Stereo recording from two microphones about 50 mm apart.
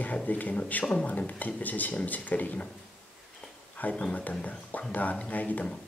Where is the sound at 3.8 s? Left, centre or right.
Left.